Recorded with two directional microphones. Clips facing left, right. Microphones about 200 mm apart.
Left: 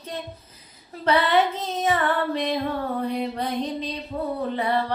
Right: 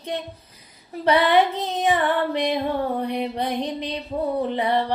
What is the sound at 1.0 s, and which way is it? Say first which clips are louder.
Female singing: right 2 dB; 15° right (ahead or behind).